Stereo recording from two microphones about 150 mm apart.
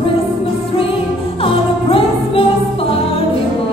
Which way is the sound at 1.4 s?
40° left (ahead or behind).